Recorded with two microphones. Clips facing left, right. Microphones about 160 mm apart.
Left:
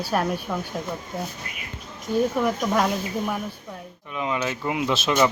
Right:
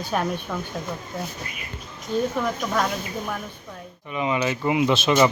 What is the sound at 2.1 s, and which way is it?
Speech, 10° left (ahead or behind).